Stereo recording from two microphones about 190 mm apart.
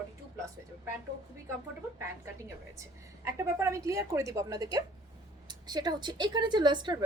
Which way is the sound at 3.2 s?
15° right (ahead or behind).